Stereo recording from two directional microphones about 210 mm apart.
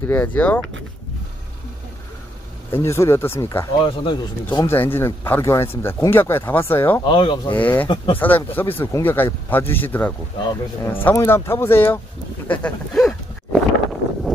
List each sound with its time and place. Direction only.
0.0 s speech: 10° left (ahead or behind)
2.7 s speech: 15° left (ahead or behind)
4.6 s speech: 10° left (ahead or behind)
7.1 s speech: 25° left (ahead or behind)
7.5 s speech: 10° left (ahead or behind)